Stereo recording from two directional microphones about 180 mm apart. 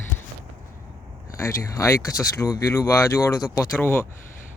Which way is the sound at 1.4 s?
20° left (ahead or behind).